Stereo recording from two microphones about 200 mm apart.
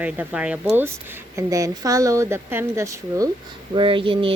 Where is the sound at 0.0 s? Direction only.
5° right (ahead or behind).